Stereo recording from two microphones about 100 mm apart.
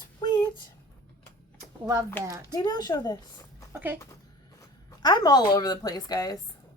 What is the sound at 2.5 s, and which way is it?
Speech, 45° left (ahead or behind).